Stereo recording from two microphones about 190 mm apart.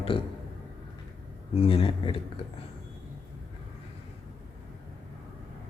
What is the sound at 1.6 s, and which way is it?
Speech, 30° left (ahead or behind).